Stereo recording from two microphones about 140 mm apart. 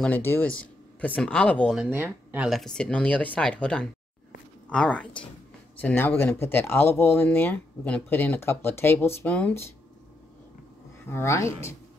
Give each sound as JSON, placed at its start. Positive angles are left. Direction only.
{"t": 0.0, "sound": "speech", "side_deg": 15}
{"t": 1.8, "sound": "speech", "side_deg": -15}
{"t": 11.1, "sound": "speech", "side_deg": 20}